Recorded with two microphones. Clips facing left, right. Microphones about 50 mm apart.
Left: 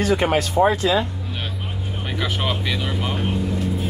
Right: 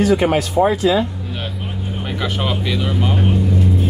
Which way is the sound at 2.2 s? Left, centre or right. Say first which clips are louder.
Right 3 dB; centre.